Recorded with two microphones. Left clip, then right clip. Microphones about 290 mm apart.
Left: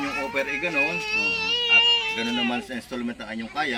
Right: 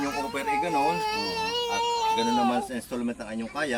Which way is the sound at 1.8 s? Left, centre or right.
Right.